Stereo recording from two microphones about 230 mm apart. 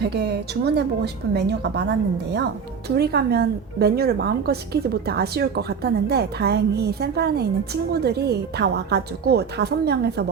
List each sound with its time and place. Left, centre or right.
0.0 s a woman's voice: right